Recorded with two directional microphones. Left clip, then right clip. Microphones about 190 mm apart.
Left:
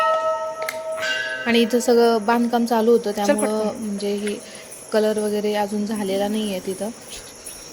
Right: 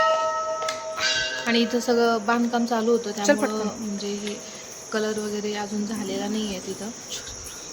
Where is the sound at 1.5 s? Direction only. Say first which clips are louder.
Left 6 dB; 20° left (ahead or behind).